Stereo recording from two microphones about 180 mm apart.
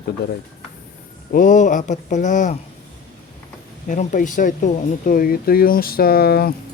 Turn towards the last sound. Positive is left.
turn(degrees=60)  # may be behind; listen again after turning